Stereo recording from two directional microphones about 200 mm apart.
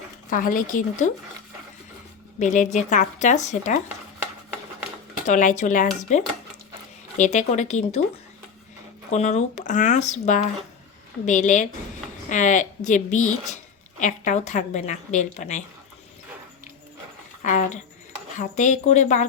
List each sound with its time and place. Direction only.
0.3 s speech: 45° left (ahead or behind)
2.4 s speech: 40° left (ahead or behind)
5.2 s speech: 40° left (ahead or behind)
9.1 s speech: 35° left (ahead or behind)
17.4 s speech: 40° left (ahead or behind)